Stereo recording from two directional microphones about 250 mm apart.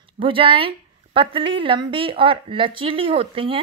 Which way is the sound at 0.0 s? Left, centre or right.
Right.